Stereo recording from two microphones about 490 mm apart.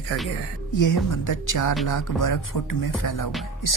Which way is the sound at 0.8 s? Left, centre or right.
Left.